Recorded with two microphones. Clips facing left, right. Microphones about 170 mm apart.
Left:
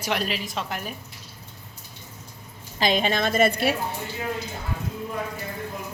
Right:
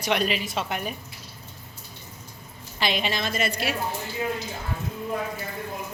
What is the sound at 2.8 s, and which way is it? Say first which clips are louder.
Speech: left 4 dB; 45° left (ahead or behind).